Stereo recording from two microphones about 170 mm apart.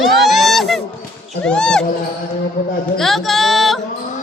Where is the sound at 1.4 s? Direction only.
5° left (ahead or behind).